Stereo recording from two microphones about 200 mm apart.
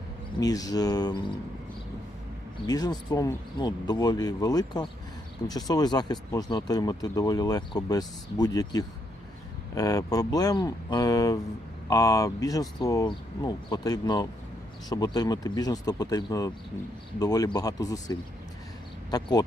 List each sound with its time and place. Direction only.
0.3 s speech: 20° left (ahead or behind)
2.6 s speech: 20° left (ahead or behind)